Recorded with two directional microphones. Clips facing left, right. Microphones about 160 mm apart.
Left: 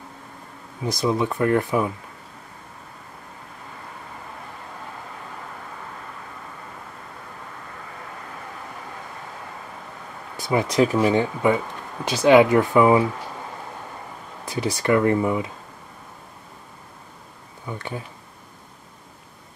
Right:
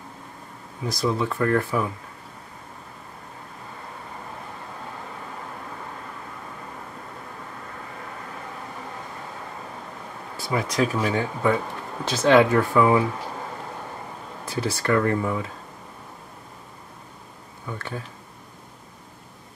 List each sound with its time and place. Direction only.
0.8 s speech: 20° left (ahead or behind)
10.3 s speech: 20° left (ahead or behind)
14.4 s speech: 15° left (ahead or behind)
17.6 s speech: 15° left (ahead or behind)